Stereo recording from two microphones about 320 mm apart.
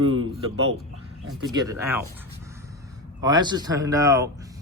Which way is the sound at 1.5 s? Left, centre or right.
Centre.